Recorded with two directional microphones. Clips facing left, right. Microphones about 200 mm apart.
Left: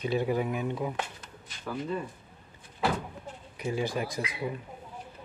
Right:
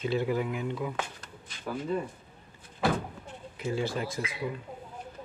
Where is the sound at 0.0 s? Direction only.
15° left (ahead or behind).